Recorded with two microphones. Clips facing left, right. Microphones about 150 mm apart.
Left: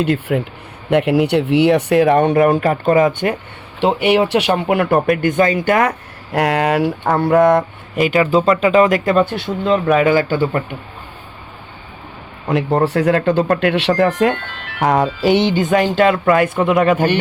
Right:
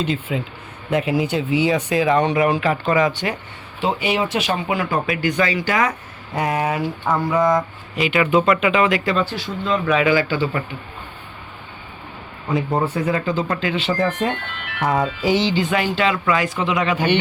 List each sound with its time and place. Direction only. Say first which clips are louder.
0.0 s speech: left 6 dB; 65° left (ahead or behind)
3.8 s speech: left 7 dB; 65° left (ahead or behind)
6.3 s speech: left 6 dB; 80° left
8.0 s speech: left 3 dB; 35° left (ahead or behind)
12.5 s speech: left 5 dB; 75° left (ahead or behind)
15.2 s speech: left 4 dB; 60° left (ahead or behind)